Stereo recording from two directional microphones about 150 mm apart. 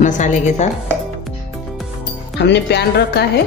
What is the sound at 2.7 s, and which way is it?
Speech, 90° left.